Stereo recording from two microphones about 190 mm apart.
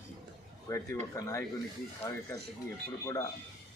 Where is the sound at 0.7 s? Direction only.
15° left (ahead or behind).